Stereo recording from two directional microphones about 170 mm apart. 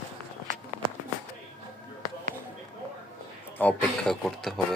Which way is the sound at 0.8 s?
30° right (ahead or behind).